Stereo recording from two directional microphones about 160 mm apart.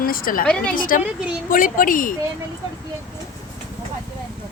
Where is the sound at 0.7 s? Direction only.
60° left (ahead or behind).